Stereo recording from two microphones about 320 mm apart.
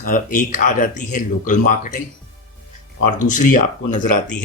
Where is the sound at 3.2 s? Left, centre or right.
Left.